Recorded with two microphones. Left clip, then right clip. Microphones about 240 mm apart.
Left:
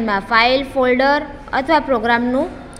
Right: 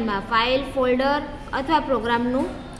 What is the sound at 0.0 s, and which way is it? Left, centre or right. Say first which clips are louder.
A woman's voice: left 7 dB; left.